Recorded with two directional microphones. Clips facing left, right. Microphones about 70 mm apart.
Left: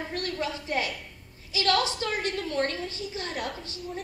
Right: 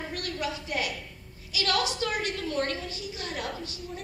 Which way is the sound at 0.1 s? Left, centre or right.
Left.